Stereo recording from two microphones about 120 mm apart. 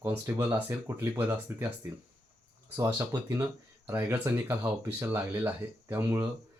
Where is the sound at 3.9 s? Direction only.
20° right (ahead or behind).